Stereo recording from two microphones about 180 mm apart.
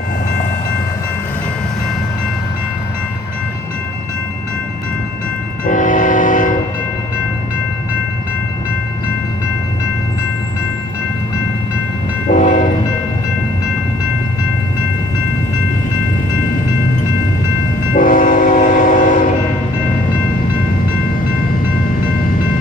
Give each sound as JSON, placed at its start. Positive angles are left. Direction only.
{"t": 5.7, "sound": "train", "side_deg": 45}
{"t": 12.3, "sound": "train", "side_deg": 45}
{"t": 17.9, "sound": "train", "side_deg": 50}